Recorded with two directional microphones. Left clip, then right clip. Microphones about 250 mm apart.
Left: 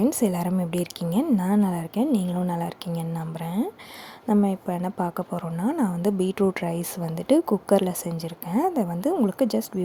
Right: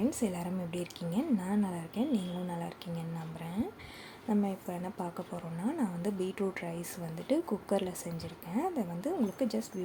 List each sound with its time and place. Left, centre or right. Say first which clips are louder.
0.0 s a woman's voice: left 10 dB; left